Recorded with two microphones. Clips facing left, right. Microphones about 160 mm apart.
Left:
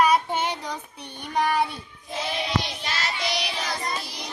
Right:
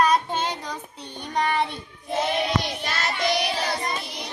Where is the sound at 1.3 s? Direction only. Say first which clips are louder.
Left 1 dB; 5° left (ahead or behind).